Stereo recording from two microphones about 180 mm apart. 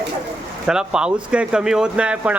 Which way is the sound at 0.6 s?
5° right (ahead or behind).